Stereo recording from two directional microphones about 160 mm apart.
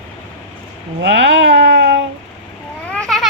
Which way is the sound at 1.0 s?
90° right.